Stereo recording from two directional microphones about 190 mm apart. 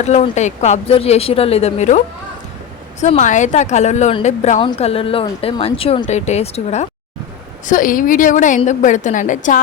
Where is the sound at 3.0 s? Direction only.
40° left (ahead or behind).